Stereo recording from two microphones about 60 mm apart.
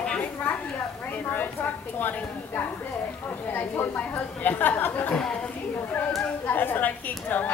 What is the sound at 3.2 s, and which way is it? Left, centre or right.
A woman's voice, left.